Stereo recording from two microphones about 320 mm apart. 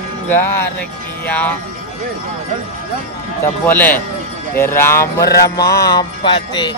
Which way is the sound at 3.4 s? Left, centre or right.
Centre.